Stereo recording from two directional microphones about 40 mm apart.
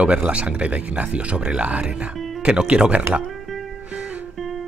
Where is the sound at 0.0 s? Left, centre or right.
Right.